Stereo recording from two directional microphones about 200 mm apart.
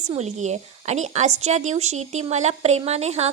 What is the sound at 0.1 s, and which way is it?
Speech, 35° right (ahead or behind).